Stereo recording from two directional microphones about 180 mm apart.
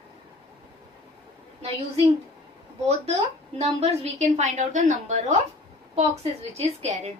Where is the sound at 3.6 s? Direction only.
35° right (ahead or behind).